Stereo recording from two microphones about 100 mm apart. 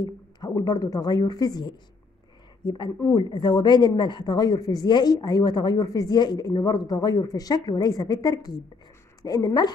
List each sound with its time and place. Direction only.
0.5 s a woman's voice: 35° left (ahead or behind)
3.1 s a woman's voice: 45° left (ahead or behind)